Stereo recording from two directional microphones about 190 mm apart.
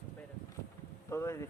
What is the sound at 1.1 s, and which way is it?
Speech, 15° left (ahead or behind).